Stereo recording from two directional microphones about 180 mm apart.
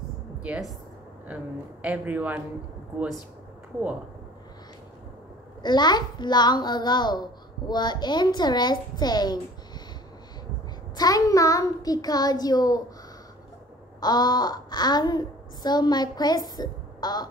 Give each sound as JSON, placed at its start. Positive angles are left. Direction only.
{"t": 0.4, "sound": "a woman's voice", "side_deg": -5}
{"t": 5.6, "sound": "a child's voice", "side_deg": 25}
{"t": 11.0, "sound": "a child's voice", "side_deg": 20}
{"t": 13.9, "sound": "a child's voice", "side_deg": 20}